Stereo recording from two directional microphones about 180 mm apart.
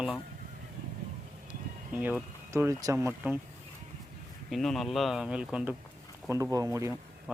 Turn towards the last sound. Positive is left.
turn(degrees=-5)  # may be behind; listen again after turning